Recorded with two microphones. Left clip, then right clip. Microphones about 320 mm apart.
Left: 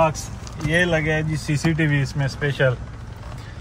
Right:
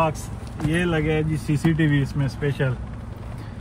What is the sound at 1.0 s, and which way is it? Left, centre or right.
Speech, left.